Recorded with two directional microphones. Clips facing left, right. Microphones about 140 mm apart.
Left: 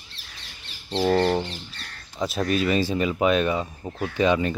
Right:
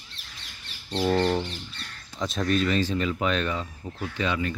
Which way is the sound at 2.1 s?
10° left (ahead or behind).